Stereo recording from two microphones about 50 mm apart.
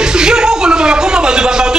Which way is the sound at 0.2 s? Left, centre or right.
Centre.